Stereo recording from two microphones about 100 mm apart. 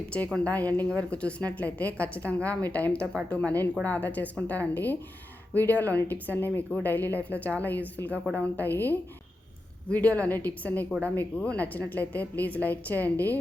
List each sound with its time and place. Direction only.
0.3 s speech: 15° left (ahead or behind)